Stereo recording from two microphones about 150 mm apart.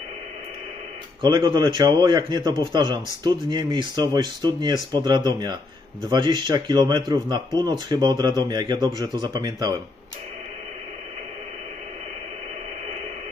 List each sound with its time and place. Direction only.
1.2 s speech: 30° right (ahead or behind)